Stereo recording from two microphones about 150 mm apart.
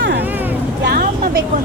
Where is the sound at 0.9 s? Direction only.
80° right.